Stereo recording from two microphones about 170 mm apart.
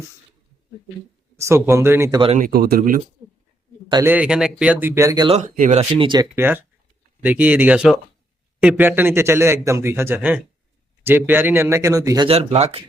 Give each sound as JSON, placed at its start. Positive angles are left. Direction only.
{"t": 1.4, "sound": "speech", "side_deg": -15}
{"t": 2.3, "sound": "speech", "side_deg": -60}
{"t": 4.0, "sound": "speech", "side_deg": -10}
{"t": 5.4, "sound": "speech", "side_deg": -45}
{"t": 6.0, "sound": "speech", "side_deg": -25}
{"t": 6.3, "sound": "speech", "side_deg": -10}